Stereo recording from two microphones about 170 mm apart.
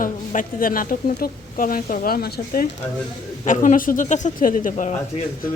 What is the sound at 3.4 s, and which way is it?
A woman's voice, 50° left (ahead or behind).